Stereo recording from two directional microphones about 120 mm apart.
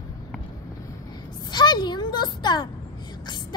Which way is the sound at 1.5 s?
35° left (ahead or behind).